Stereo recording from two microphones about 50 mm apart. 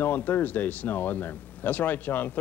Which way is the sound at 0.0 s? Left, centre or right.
Left.